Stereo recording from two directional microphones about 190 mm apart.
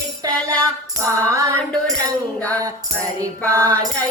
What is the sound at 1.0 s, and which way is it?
Music, 15° right (ahead or behind).